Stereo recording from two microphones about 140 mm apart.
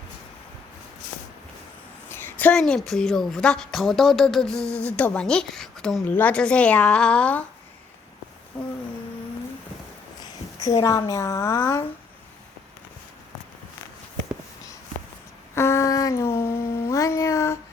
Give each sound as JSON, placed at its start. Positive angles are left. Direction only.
{"t": 2.0, "sound": "a woman's voice", "side_deg": 15}
{"t": 10.6, "sound": "a woman's voice", "side_deg": 25}
{"t": 15.5, "sound": "a sound", "side_deg": 20}